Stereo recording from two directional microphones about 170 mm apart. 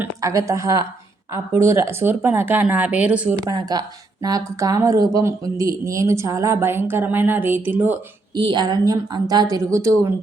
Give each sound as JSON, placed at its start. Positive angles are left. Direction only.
{"t": 0.0, "sound": "speech", "side_deg": -20}
{"t": 3.4, "sound": "speech", "side_deg": -25}
{"t": 8.4, "sound": "a woman's voice", "side_deg": -25}